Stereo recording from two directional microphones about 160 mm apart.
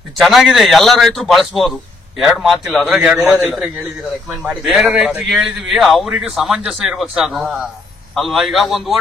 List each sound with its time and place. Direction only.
0.2 s a man's voice: centre (ahead or behind)